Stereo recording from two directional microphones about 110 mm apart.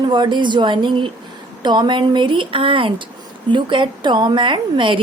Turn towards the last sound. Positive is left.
turn(degrees=-50)  # may be behind; listen again after turning